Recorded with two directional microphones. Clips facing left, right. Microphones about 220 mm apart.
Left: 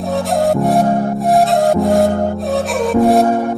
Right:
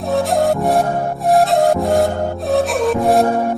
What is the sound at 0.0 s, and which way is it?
Music, centre (ahead or behind).